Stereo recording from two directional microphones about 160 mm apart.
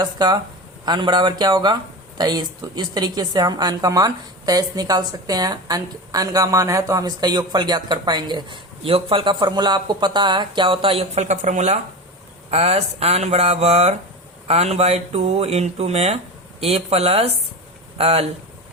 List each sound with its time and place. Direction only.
0.0 s speech: 25° right (ahead or behind)